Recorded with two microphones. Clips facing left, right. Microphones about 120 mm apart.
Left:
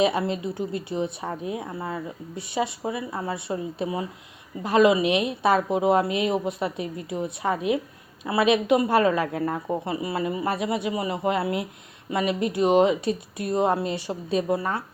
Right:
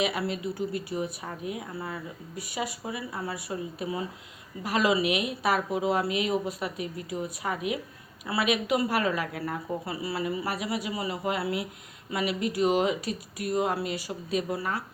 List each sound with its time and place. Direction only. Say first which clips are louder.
0.0 s speech: left 6 dB; 25° left (ahead or behind)